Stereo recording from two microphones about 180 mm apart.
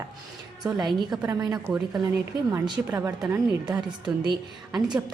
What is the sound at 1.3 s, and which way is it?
A woman's voice, 20° right (ahead or behind).